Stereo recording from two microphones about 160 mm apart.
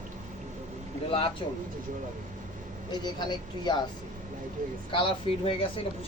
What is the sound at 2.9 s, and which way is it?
Speech, 25° left (ahead or behind).